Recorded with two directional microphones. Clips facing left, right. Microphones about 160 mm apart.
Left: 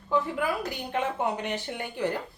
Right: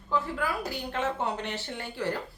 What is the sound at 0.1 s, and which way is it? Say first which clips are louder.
Speech: left 3 dB; 15° left (ahead or behind).